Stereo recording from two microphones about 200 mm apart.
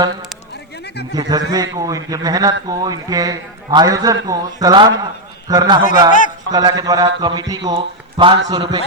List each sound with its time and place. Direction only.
1.1 s a man's voice: 20° right (ahead or behind)
6.1 s a man's voice: 40° left (ahead or behind)
6.5 s a man's voice: 20° right (ahead or behind)